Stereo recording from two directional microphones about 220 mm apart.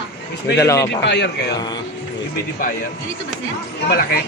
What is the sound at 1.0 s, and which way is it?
Speech, 50° left (ahead or behind).